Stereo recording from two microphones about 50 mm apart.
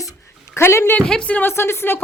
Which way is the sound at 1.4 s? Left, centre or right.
Left.